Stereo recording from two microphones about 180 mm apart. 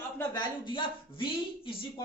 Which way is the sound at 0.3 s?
25° left (ahead or behind).